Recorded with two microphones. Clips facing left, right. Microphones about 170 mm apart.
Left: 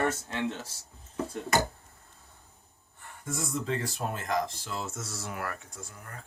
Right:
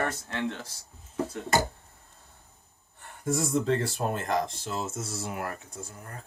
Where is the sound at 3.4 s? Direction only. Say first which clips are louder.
Right 4 dB; 45° right (ahead or behind).